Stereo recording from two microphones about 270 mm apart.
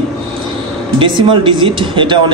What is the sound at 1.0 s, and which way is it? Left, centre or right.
Speech, centre.